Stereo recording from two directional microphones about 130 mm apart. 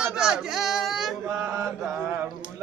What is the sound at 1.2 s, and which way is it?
Mantra, 20° right (ahead or behind).